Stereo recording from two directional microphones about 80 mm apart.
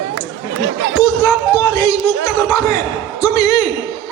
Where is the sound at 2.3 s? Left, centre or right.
Left.